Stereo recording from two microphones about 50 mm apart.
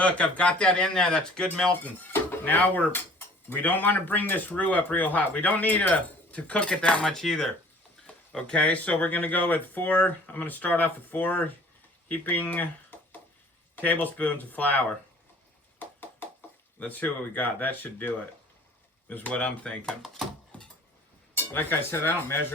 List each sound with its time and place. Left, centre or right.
0.0 s speech: left
1.8 s speech: left
13.7 s speech: left
15.8 s a sound: left
16.8 s speech: left
21.3 s speech: left